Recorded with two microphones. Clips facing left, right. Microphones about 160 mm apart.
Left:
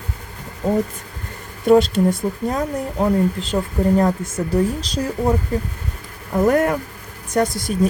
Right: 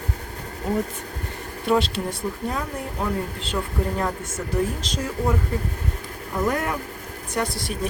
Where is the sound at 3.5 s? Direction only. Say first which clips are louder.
Left 7 dB; 40° left (ahead or behind).